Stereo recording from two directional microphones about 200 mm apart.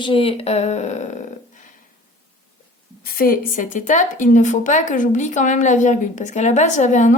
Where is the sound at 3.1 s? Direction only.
45° left (ahead or behind).